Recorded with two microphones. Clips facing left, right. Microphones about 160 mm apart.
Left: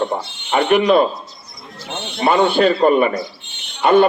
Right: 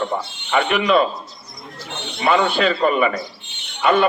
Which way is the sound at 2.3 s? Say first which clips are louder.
Left 3 dB; 35° left (ahead or behind).